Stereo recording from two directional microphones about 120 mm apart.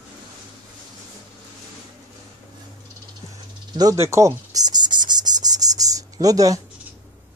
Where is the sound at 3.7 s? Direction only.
25° right (ahead or behind).